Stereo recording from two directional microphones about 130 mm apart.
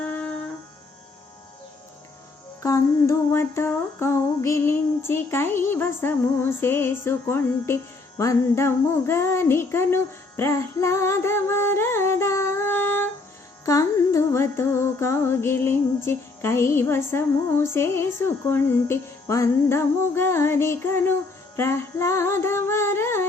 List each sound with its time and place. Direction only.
0.0 s music: 10° left (ahead or behind)
2.6 s music: 25° left (ahead or behind)